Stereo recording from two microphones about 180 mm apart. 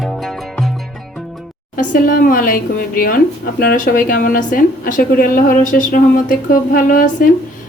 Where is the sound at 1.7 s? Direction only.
45° left (ahead or behind).